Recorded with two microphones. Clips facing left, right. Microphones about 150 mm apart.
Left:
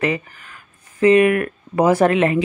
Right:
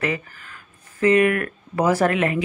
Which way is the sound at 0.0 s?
20° left (ahead or behind).